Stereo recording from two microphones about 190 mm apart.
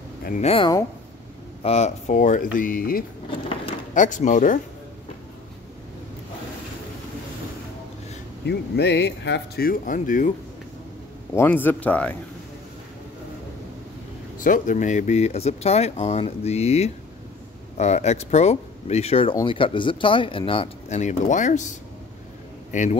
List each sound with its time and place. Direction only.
0.2 s speech: 45° left (ahead or behind)
0.5 s speech: 30° left (ahead or behind)
8.5 s speech: 60° left (ahead or behind); by 10.3 s 45° left (ahead or behind)
11.3 s speech: 10° left (ahead or behind)
14.4 s a man's voice: 45° left (ahead or behind)